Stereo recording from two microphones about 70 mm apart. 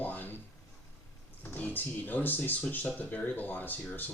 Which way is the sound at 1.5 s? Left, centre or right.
Left.